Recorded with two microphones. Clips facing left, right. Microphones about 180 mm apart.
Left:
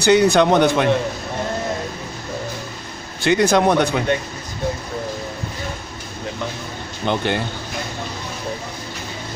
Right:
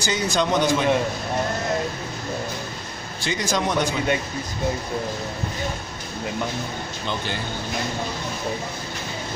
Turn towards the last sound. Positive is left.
turn(degrees=60)  # may be behind; listen again after turning